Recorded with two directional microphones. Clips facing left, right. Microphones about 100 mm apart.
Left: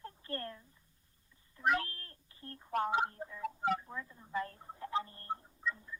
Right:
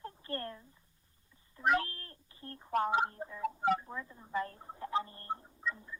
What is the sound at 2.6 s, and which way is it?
Telephone, 35° right (ahead or behind).